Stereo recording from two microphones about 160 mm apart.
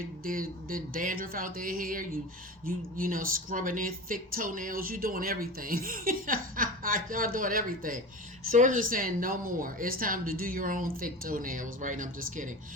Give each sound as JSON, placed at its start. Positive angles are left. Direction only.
{"t": 0.3, "sound": "speech", "side_deg": -60}